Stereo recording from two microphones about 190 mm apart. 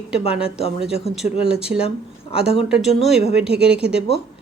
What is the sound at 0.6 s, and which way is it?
Speech, 30° left (ahead or behind).